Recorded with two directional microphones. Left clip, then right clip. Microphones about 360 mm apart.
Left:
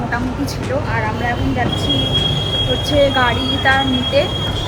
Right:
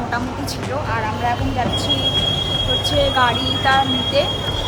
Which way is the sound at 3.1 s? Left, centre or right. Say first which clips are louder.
Left 1 dB; centre.